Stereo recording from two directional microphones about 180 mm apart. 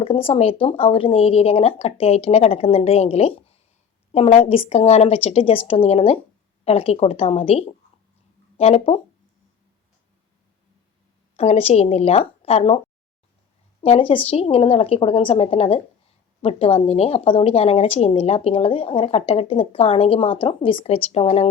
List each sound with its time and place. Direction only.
0.0 s a woman's voice: 30° left (ahead or behind)
11.3 s a woman's voice: 35° left (ahead or behind)
13.8 s a woman's voice: 30° left (ahead or behind)